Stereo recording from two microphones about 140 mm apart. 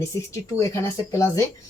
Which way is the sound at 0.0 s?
20° left (ahead or behind).